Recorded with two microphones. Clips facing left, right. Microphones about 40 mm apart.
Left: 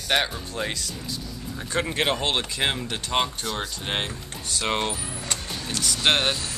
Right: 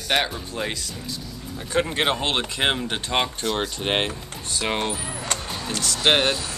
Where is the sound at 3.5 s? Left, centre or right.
Right.